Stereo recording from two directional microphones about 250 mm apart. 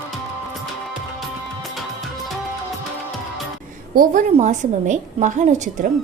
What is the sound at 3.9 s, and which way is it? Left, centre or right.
A woman's voice, right.